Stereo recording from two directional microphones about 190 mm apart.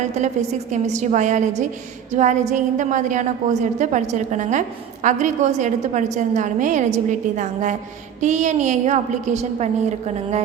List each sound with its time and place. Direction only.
0.7 s a woman's voice: 35° right (ahead or behind)